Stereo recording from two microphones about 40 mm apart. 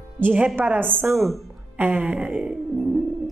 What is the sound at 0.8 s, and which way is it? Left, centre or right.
A woman's voice, right.